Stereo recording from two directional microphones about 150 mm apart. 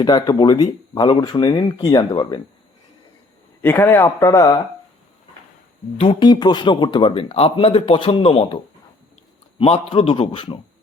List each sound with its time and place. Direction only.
0.0 s speech: 25° left (ahead or behind)
3.6 s speech: 15° left (ahead or behind)
6.0 s speech: 35° left (ahead or behind)
9.6 s speech: 35° left (ahead or behind)